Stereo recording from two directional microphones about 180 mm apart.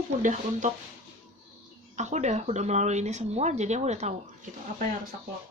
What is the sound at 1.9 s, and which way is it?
Speech, 40° right (ahead or behind).